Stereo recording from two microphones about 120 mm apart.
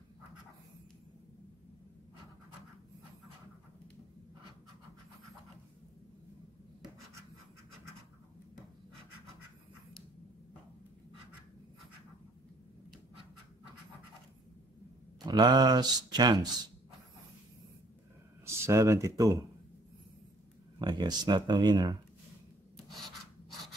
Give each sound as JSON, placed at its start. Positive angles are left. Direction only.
{"t": 15.2, "sound": "speech", "side_deg": -35}
{"t": 18.4, "sound": "speech", "side_deg": -25}
{"t": 20.8, "sound": "speech", "side_deg": -35}